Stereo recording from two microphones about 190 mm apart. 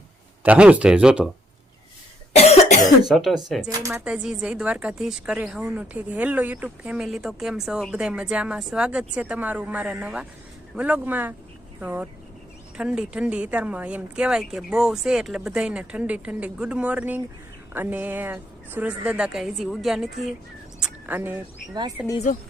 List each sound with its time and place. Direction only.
0.4 s speech: 5° right (ahead or behind)
2.3 s cough: 35° left (ahead or behind)
3.1 s a woman's voice: centre (ahead or behind)
3.7 s speech: 15° right (ahead or behind)
4.0 s a woman's voice: 5° right (ahead or behind)
20.7 s a sound: 5° right (ahead or behind)
22.0 s a woman's voice: 5° right (ahead or behind)